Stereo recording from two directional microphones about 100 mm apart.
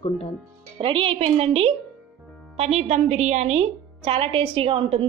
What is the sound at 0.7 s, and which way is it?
A woman's voice, 65° right (ahead or behind).